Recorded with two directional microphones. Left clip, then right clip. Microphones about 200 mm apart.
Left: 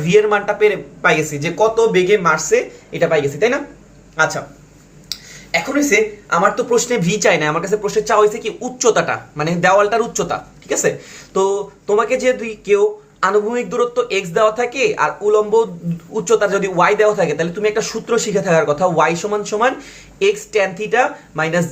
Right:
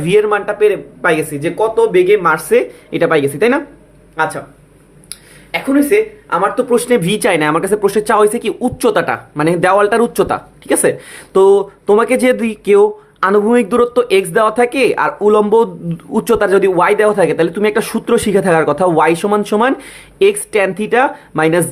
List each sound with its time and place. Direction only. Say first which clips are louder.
0.0 s speech: right 1 dB; 35° right (ahead or behind)
4.2 s speech: even; 35° right (ahead or behind); by 21.6 s 50° right (ahead or behind)